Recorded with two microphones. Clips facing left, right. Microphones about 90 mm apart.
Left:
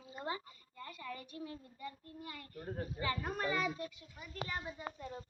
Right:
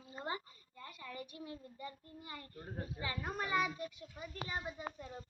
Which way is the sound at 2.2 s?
25° right (ahead or behind).